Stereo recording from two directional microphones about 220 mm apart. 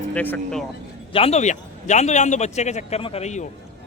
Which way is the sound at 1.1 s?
30° left (ahead or behind).